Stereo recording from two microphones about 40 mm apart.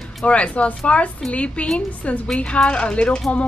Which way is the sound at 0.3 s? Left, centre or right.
Left.